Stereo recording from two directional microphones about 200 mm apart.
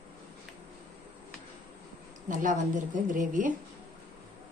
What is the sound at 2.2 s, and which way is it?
A woman's voice, 40° right (ahead or behind).